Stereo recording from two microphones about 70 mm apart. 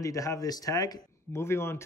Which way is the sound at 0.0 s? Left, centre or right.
Left.